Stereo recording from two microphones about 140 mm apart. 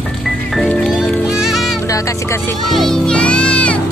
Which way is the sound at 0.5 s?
5° left (ahead or behind).